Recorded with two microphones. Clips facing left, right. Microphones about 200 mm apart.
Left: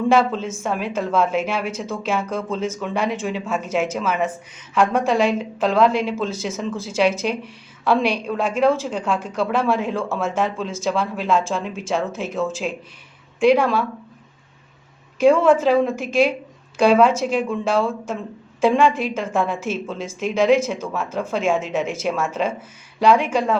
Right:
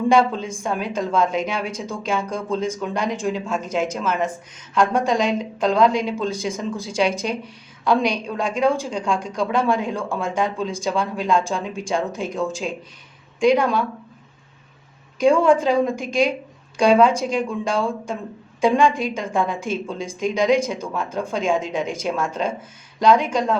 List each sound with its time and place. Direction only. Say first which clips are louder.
0.1 s a woman's voice: right 1 dB; 5° left (ahead or behind)
15.2 s a woman's voice: left 1 dB; 5° left (ahead or behind)